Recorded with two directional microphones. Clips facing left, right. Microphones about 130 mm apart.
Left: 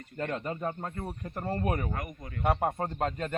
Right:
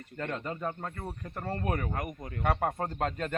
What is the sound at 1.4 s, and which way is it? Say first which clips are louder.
Speech: left 2 dB; 10° left (ahead or behind).